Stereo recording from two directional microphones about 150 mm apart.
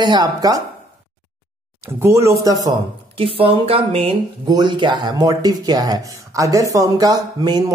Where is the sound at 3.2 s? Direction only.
40° right (ahead or behind).